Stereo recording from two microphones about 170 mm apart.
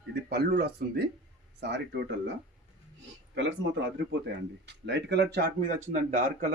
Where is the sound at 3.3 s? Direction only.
90° right.